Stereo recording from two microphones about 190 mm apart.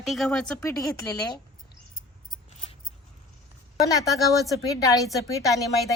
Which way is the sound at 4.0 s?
15° left (ahead or behind).